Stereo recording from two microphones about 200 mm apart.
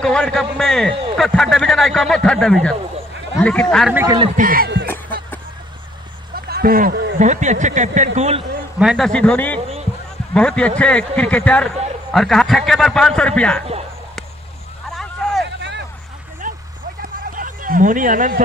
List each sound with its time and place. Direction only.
0.0 s speech: 5° left (ahead or behind)
3.9 s a man's voice: 15° right (ahead or behind)
4.4 s speech: 45° right (ahead or behind)
4.8 s music: 10° left (ahead or behind)
6.3 s a sound: 50° right (ahead or behind)
7.2 s speech: 35° right (ahead or behind)
8.7 s speech: centre (ahead or behind)
15.4 s vehicle: 60° right (ahead or behind)
16.4 s vehicle: 40° right (ahead or behind)
17.4 s speech: 45° right (ahead or behind)